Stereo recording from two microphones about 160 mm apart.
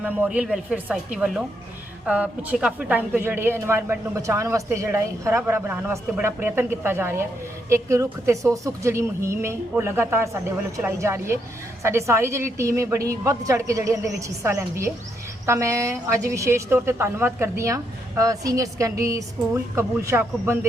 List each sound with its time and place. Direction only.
0.0 s a woman's voice: 10° right (ahead or behind)